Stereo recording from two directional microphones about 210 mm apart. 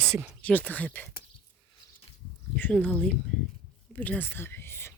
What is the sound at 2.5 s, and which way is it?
Speech, 5° left (ahead or behind).